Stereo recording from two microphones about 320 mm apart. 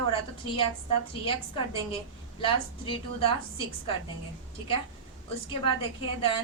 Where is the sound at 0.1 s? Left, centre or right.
Centre.